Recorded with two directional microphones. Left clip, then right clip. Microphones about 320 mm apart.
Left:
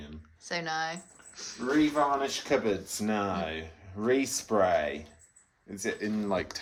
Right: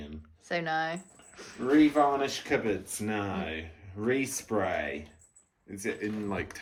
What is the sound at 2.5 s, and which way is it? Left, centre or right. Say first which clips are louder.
Speech: left 2 dB; left.